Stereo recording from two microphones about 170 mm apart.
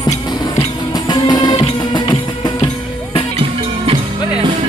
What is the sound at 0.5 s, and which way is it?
Music, 25° left (ahead or behind).